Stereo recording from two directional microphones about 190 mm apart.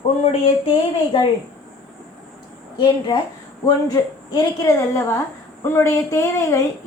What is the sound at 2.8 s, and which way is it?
A woman's voice, 25° left (ahead or behind).